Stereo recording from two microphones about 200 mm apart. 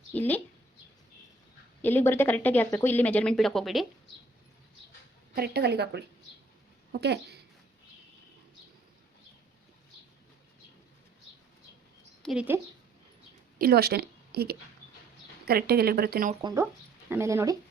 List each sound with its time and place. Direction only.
0.1 s speech: 10° left (ahead or behind)
1.8 s speech: 10° left (ahead or behind)
5.3 s a woman's voice: 50° right (ahead or behind)
12.2 s speech: 5° right (ahead or behind)
13.6 s speech: 50° right (ahead or behind)
16.4 s speech: 20° right (ahead or behind)